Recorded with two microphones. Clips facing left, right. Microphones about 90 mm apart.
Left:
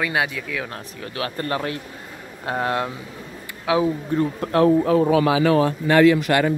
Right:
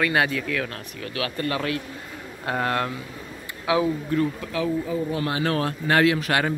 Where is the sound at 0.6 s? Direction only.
25° left (ahead or behind).